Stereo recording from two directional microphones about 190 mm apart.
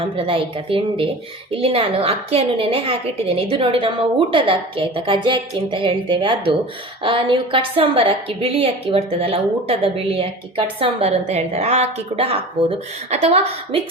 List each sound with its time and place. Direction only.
0.2 s a woman's voice: 30° right (ahead or behind)